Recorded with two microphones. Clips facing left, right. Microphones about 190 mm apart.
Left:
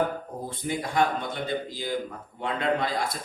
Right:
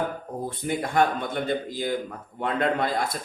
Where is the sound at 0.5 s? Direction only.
55° right (ahead or behind).